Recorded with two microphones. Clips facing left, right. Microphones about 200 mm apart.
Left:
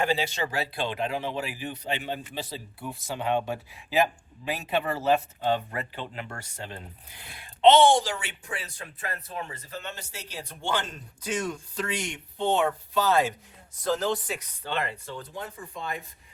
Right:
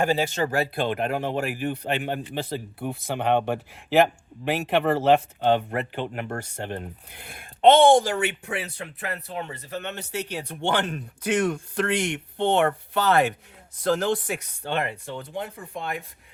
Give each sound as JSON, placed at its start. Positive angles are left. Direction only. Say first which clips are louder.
{"t": 0.0, "sound": "speech", "louder": "right 4 dB", "side_deg": -45}
{"t": 14.1, "sound": "speech", "louder": "right 4 dB", "side_deg": -50}